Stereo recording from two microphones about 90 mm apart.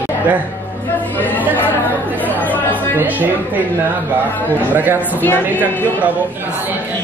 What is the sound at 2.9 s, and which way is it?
Speech, 20° right (ahead or behind).